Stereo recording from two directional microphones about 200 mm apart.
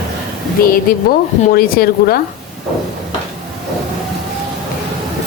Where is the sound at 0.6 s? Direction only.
50° left (ahead or behind).